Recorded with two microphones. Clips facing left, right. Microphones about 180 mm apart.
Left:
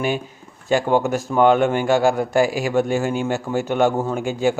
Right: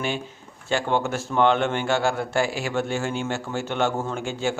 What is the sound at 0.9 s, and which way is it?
Speech, 10° left (ahead or behind).